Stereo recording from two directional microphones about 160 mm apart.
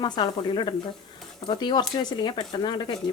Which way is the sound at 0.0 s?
30° left (ahead or behind).